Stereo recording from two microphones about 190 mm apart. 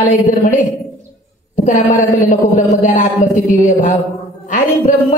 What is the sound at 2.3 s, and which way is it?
A woman's voice, 45° left (ahead or behind).